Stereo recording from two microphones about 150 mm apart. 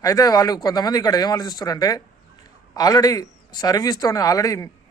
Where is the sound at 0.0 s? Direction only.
25° left (ahead or behind).